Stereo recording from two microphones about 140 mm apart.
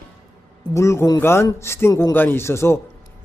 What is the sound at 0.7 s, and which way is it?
Speech, 20° left (ahead or behind).